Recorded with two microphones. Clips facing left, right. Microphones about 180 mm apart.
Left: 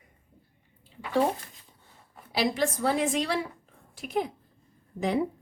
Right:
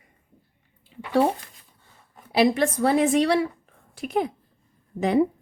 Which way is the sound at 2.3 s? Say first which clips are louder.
Right 7 dB; 60° right (ahead or behind).